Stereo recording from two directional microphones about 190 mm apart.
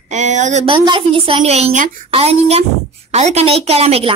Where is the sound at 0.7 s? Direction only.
25° right (ahead or behind).